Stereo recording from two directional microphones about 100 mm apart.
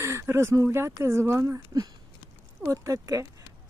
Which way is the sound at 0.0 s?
25° right (ahead or behind).